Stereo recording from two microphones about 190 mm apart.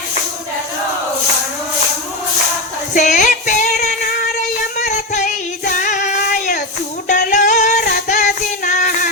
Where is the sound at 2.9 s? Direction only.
40° left (ahead or behind).